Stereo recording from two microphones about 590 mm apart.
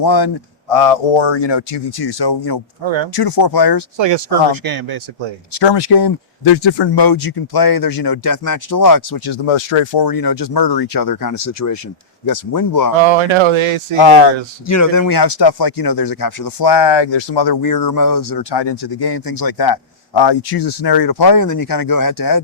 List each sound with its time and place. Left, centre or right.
0.0 s a man's voice: left
0.7 s speech: left
2.8 s speech: right
3.2 s a man's voice: left
3.9 s speech: right
5.6 s a man's voice: left
9.5 s a man's voice: left
13.0 s speech: right
13.9 s speech: left
14.7 s a man's voice: left
18.5 s a man's voice: left